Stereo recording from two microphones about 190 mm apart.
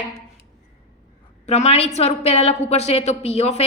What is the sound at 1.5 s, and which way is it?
A woman's voice, 35° left (ahead or behind).